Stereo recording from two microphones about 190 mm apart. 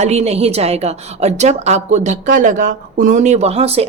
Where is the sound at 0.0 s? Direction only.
35° right (ahead or behind).